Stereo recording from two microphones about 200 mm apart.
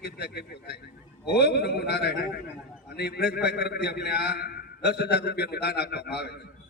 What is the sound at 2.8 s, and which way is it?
A man's voice, 55° left (ahead or behind).